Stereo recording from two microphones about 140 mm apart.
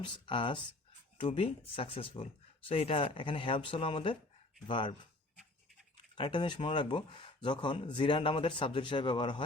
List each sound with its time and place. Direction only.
0.0 s speech: 35° left (ahead or behind)
6.1 s speech: 35° left (ahead or behind)